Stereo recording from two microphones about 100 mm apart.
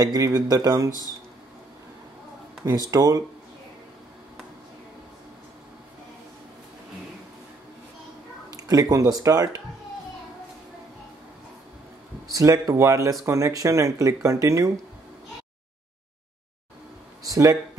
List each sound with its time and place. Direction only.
0.0 s speech: 40° right (ahead or behind)
2.9 s speech: 40° right (ahead or behind)
8.5 s speech: 35° right (ahead or behind)
12.3 s speech: 35° right (ahead or behind)
17.2 s a sound: 35° right (ahead or behind)